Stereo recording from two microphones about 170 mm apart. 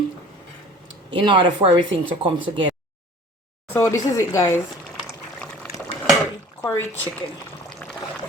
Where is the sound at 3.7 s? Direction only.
15° left (ahead or behind).